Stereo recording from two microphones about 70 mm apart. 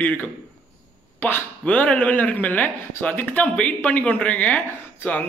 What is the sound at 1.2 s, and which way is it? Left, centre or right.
A man's voice, left.